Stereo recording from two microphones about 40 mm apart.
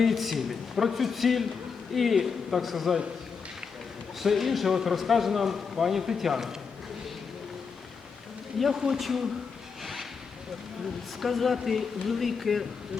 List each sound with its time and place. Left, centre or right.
0.0 s a man's voice: centre
4.2 s a man's voice: centre
8.7 s a man's voice: centre
9.8 s zipper: centre
11.2 s a man's voice: centre